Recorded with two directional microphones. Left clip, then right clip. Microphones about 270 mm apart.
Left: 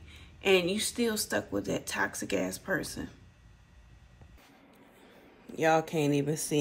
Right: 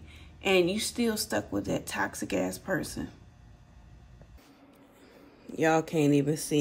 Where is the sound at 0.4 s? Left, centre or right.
Centre.